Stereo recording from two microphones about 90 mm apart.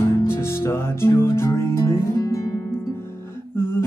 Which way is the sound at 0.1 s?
30° left (ahead or behind).